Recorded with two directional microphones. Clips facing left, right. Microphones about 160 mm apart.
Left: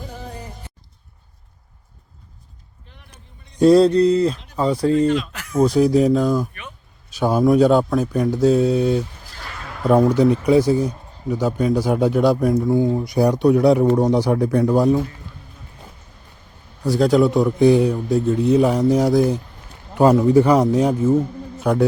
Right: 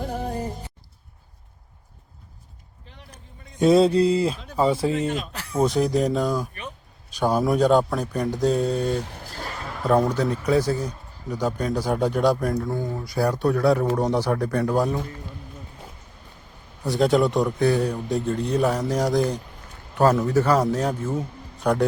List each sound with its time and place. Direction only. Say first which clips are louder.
0.0 s music: right 6 dB; 50° right (ahead or behind)
3.6 s speech: left 4 dB; centre (ahead or behind)
5.0 s speech: left 8 dB; 45° right (ahead or behind)
5.5 s speech: left 6 dB; centre (ahead or behind)
9.3 s a sound: right 3 dB; 40° right (ahead or behind)
9.6 s a man's voice: left 5 dB; 5° left (ahead or behind)
16.8 s a man's voice: left 4 dB; centre (ahead or behind)